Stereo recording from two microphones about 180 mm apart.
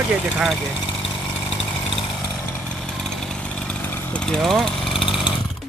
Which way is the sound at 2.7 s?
5° left (ahead or behind).